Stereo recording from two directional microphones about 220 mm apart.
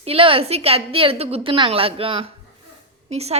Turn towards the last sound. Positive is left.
turn(degrees=-30)  # may be behind; listen again after turning